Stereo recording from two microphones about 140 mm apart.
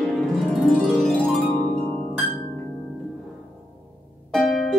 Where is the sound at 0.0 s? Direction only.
Centre (ahead or behind).